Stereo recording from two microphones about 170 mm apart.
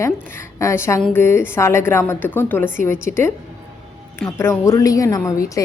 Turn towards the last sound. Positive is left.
turn(degrees=20)  # may be behind; listen again after turning